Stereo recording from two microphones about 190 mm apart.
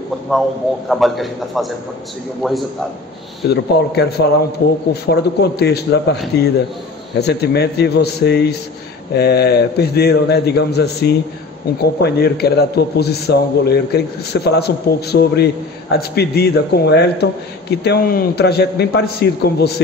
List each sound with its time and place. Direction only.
0.3 s a man's voice: centre (ahead or behind)
3.4 s a man's voice: 60° left (ahead or behind)